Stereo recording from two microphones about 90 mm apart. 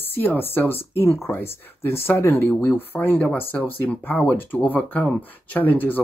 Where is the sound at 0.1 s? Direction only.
20° left (ahead or behind).